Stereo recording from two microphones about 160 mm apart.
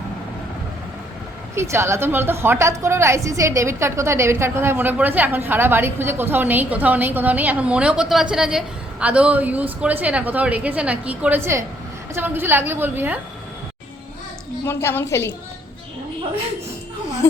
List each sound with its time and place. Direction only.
1.5 s a woman's voice: 15° right (ahead or behind)
14.6 s a woman's voice: 15° left (ahead or behind)